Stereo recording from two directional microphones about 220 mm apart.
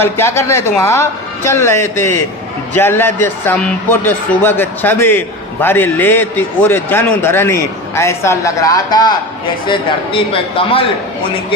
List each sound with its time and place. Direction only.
0.0 s a man's voice: 10° left (ahead or behind)